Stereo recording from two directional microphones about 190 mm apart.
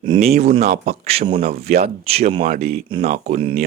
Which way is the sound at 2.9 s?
35° right (ahead or behind).